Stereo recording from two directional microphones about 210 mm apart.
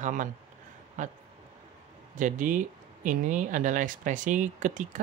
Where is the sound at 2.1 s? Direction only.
35° right (ahead or behind).